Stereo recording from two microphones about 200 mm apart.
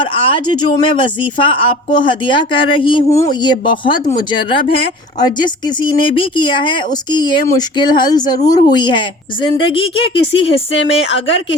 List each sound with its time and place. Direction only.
0.0 s speech: 25° left (ahead or behind)
10.7 s speech: 65° left (ahead or behind)